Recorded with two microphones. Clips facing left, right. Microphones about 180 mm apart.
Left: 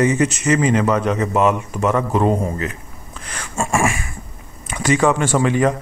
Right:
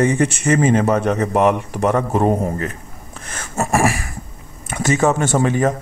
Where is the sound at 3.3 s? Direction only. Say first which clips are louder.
Right 2 dB; 40° right (ahead or behind).